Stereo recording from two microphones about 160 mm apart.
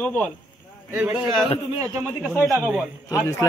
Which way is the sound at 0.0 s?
10° left (ahead or behind).